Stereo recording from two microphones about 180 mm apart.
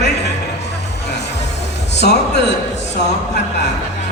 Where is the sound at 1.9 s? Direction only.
70° left (ahead or behind).